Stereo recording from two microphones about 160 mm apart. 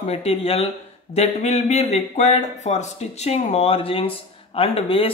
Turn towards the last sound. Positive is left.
turn(degrees=35)  # may be behind; listen again after turning